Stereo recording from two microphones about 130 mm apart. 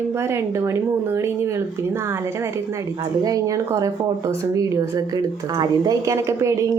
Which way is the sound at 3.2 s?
25° right (ahead or behind).